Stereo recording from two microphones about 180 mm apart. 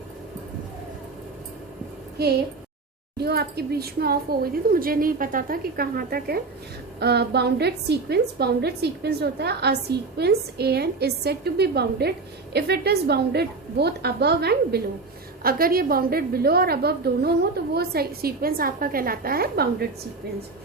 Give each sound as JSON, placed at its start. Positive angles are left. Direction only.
{"t": 3.2, "sound": "a woman's voice", "side_deg": -60}